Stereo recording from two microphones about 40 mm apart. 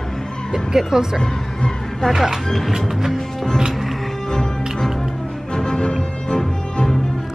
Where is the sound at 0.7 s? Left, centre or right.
Centre.